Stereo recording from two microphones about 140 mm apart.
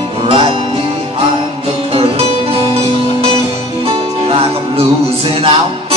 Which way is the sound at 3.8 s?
45° right (ahead or behind).